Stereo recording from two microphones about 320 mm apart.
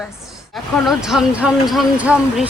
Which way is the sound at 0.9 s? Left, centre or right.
Centre.